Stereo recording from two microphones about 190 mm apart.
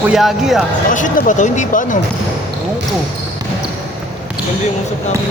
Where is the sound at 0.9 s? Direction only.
45° left (ahead or behind).